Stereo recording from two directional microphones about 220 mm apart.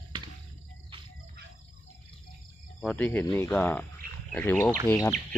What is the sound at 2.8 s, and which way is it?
Speech, 5° left (ahead or behind).